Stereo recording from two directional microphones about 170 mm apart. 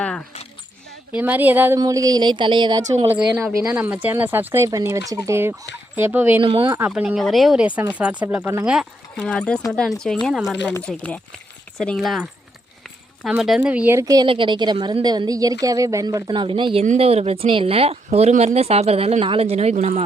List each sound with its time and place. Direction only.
0.0 s a sound: 5° left (ahead or behind)
1.1 s a woman's voice: 10° right (ahead or behind); by 2.8 s 25° right (ahead or behind)
3.1 s speech: 5° right (ahead or behind)
6.4 s speech: 30° right (ahead or behind)
6.7 s speech: 5° right (ahead or behind)
9.2 s a woman's voice: 5° left (ahead or behind); by 16.8 s 30° right (ahead or behind)
16.8 s speech: 40° right (ahead or behind)